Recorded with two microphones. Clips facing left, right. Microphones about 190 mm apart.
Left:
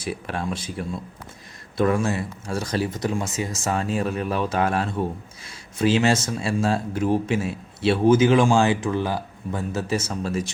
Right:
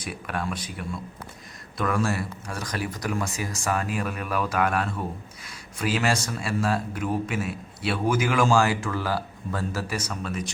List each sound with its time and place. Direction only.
0.0 s speech: 30° left (ahead or behind)